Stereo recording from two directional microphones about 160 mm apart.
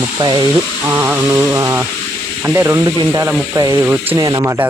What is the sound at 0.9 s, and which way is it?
Speech, 15° right (ahead or behind).